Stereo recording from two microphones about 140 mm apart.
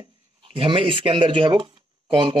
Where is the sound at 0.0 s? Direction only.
40° right (ahead or behind).